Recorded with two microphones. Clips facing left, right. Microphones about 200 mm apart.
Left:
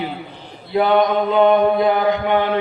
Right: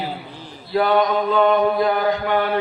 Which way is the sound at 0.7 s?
20° left (ahead or behind).